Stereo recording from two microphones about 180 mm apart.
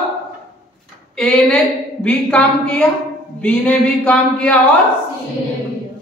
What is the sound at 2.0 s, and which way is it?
Music, 5° left (ahead or behind).